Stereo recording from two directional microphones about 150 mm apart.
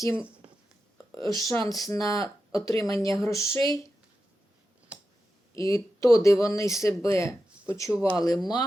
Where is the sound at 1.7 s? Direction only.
25° left (ahead or behind).